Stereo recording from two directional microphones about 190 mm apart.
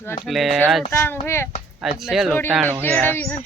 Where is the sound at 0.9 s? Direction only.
15° left (ahead or behind).